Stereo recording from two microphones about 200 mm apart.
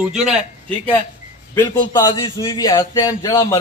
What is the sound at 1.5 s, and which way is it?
A man's voice, 15° left (ahead or behind).